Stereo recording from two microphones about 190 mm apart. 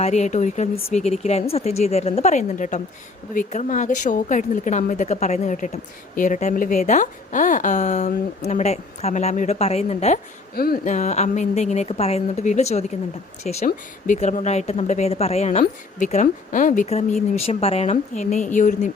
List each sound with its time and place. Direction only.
0.0 s a woman's voice: 35° left (ahead or behind)
10.5 s a woman's voice: 50° left (ahead or behind)